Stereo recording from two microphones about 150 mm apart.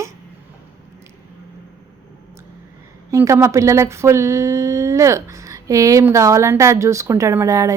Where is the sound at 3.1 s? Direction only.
20° right (ahead or behind).